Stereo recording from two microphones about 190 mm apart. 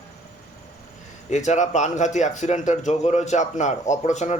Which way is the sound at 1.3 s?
40° left (ahead or behind).